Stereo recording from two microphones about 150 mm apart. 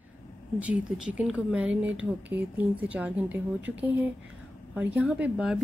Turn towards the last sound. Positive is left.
turn(degrees=-5)  # may be behind; listen again after turning